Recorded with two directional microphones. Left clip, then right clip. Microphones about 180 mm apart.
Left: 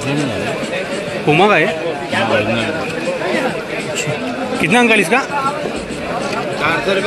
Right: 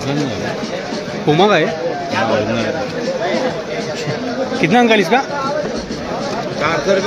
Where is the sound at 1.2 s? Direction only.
10° right (ahead or behind).